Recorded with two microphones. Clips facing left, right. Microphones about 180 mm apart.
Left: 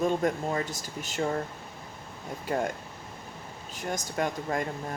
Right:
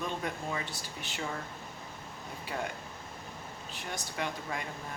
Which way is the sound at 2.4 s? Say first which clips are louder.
Left 8 dB; 45° left (ahead or behind).